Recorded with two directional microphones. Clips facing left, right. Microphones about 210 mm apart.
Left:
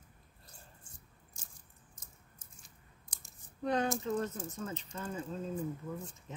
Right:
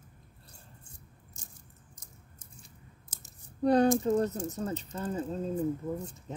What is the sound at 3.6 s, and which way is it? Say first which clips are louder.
Speech: right 9 dB; 35° right (ahead or behind).